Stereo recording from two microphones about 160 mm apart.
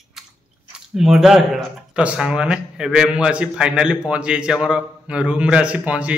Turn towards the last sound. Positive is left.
turn(degrees=-10)  # may be behind; listen again after turning